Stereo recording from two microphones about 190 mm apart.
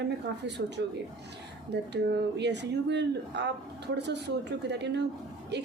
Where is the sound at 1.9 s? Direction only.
65° right (ahead or behind).